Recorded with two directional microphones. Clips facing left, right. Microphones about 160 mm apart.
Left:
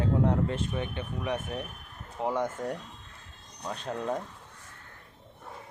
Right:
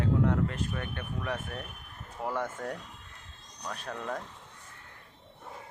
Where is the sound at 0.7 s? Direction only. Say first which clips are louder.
Left 3 dB; 20° left (ahead or behind).